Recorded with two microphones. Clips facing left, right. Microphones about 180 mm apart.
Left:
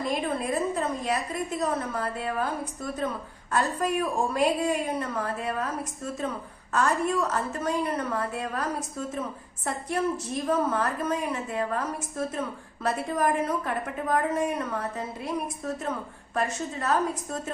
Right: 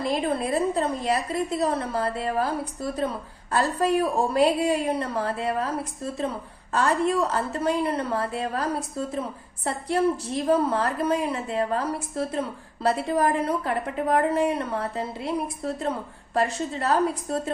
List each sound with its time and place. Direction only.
0.0 s a woman's voice: 30° right (ahead or behind)